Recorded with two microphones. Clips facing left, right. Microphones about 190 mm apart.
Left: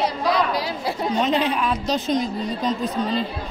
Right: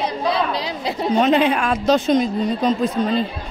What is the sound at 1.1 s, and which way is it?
Speech, 65° right (ahead or behind).